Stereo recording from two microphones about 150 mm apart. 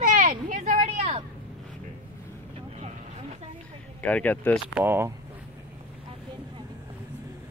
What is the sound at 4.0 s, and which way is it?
Speech, 10° left (ahead or behind).